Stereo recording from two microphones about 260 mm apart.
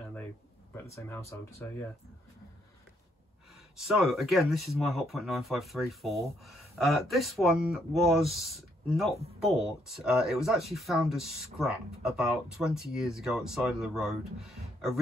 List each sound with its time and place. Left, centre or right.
0.8 s speech: centre
3.8 s speech: centre